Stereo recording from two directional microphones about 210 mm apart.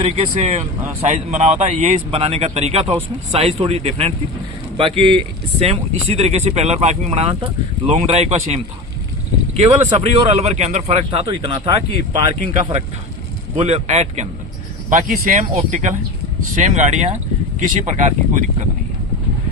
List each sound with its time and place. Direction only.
0.0 s speech: 30° right (ahead or behind)